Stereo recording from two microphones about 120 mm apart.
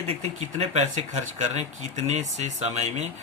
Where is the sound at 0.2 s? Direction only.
65° right (ahead or behind).